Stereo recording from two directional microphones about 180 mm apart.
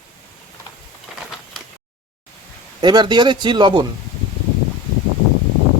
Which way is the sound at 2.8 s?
25° right (ahead or behind).